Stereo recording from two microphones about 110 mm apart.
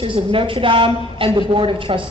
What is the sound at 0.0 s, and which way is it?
A woman's voice, 55° right (ahead or behind).